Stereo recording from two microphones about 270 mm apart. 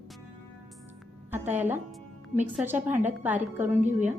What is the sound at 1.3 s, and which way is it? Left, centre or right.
A woman's voice, centre.